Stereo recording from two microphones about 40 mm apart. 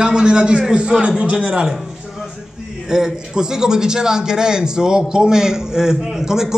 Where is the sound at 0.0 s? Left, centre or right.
Right.